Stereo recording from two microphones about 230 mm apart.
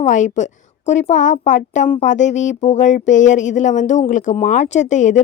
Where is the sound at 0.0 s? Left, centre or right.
Left.